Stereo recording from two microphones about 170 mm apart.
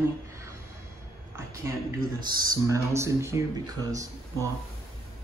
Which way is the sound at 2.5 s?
15° right (ahead or behind).